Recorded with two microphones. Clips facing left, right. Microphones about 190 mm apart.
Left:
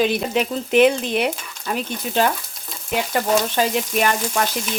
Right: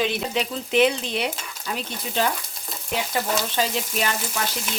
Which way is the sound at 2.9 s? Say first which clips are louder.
Left 5 dB; 55° left (ahead or behind).